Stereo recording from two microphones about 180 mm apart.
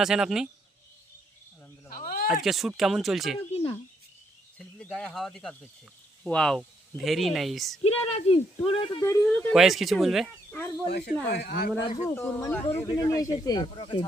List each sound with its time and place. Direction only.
0.0 s speech: 5° right (ahead or behind)
1.9 s a sound: 50° left (ahead or behind)
2.3 s speech: centre (ahead or behind)
4.5 s speech: 5° left (ahead or behind)
7.9 s speech: 35° left (ahead or behind)
9.0 s speech: 15° left (ahead or behind)
10.9 s speech: 65° left (ahead or behind)
11.9 s speech: 15° left (ahead or behind)